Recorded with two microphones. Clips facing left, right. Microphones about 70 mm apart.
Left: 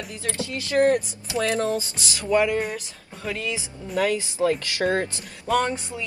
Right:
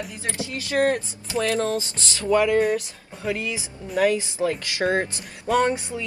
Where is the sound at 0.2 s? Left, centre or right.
Right.